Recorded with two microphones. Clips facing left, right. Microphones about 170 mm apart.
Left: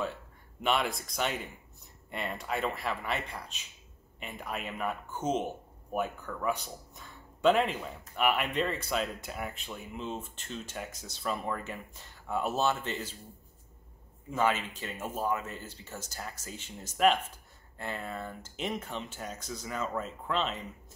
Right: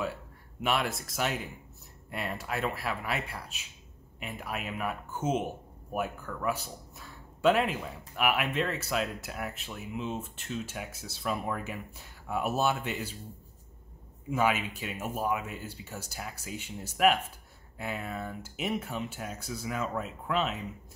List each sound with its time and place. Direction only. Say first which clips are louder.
0.6 s speech: even; 5° right (ahead or behind)
14.3 s speech: right 1 dB; 10° right (ahead or behind)